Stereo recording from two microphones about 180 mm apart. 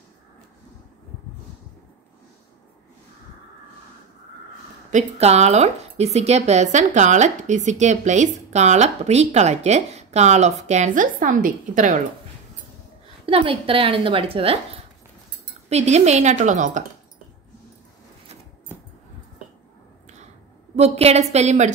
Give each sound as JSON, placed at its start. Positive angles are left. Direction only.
{"t": 4.9, "sound": "speech", "side_deg": -40}
{"t": 13.2, "sound": "speech", "side_deg": -30}
{"t": 15.7, "sound": "speech", "side_deg": -40}
{"t": 20.7, "sound": "speech", "side_deg": -35}